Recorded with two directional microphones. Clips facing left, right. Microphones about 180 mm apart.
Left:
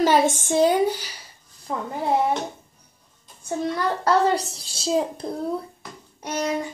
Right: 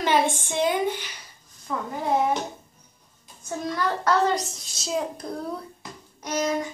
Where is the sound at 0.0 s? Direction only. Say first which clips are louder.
Left 4 dB; 40° left (ahead or behind).